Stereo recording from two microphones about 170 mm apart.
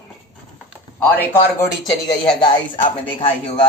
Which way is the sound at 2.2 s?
30° left (ahead or behind).